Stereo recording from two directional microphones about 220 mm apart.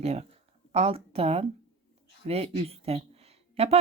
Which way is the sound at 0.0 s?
30° right (ahead or behind).